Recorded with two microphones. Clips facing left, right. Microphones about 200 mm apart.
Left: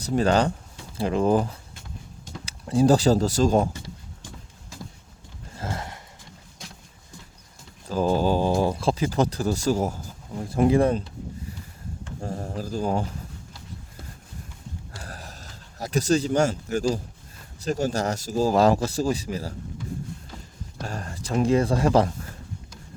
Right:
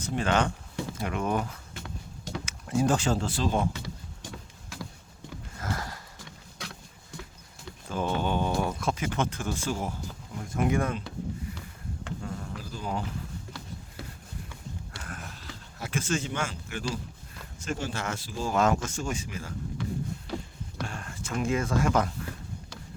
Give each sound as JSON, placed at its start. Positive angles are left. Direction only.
{"t": 0.0, "sound": "speech", "side_deg": 35}
{"t": 1.7, "sound": "a sound", "side_deg": -70}
{"t": 2.4, "sound": "speech", "side_deg": 30}
{"t": 5.5, "sound": "horse", "side_deg": 25}
{"t": 7.9, "sound": "speech", "side_deg": 35}
{"t": 12.2, "sound": "speech", "side_deg": 40}
{"t": 15.0, "sound": "a sound", "side_deg": 35}
{"t": 17.6, "sound": "speech", "side_deg": 40}
{"t": 20.3, "sound": "a sound", "side_deg": -80}
{"t": 20.8, "sound": "speech", "side_deg": 40}